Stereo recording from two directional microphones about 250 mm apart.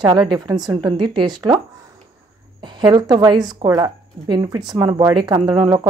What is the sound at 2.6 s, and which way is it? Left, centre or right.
Speech, centre.